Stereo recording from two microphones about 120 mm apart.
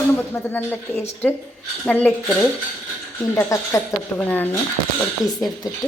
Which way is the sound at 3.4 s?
25° left (ahead or behind).